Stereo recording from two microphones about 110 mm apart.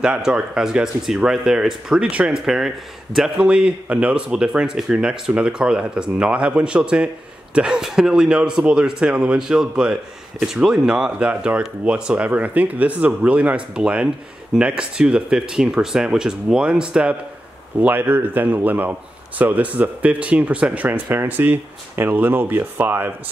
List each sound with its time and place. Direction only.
0.0 s a man's voice: 10° right (ahead or behind)